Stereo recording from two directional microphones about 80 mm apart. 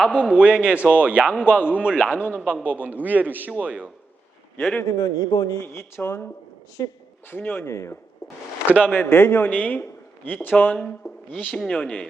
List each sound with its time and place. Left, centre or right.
0.1 s a man's voice: centre
4.8 s a man's voice: left
5.6 s a man's voice: left
6.8 s a man's voice: left
7.3 s a man's voice: left
7.7 s speech: left
8.6 s speech: centre
8.9 s a man's voice: left
11.5 s speech: centre